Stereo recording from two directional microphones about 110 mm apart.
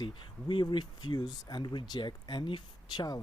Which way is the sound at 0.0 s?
45° left (ahead or behind).